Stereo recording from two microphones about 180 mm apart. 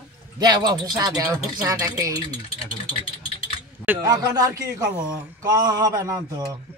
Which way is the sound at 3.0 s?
30° left (ahead or behind).